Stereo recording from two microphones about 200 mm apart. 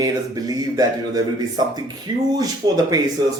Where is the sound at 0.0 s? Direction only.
20° right (ahead or behind).